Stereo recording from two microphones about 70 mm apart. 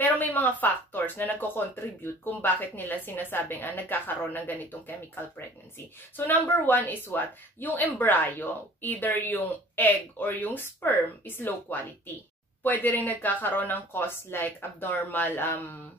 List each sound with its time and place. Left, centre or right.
0.0 s speech: left